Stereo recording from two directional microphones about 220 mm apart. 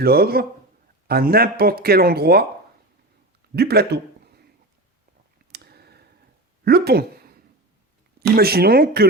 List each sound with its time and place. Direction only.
0.0 s speech: 45° right (ahead or behind)
3.5 s speech: 45° right (ahead or behind)
5.5 s a sound: 45° right (ahead or behind)
6.7 s speech: 45° right (ahead or behind)
8.4 s speech: 45° right (ahead or behind)